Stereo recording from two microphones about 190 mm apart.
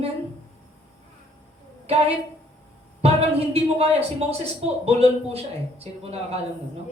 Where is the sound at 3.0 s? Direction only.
30° right (ahead or behind).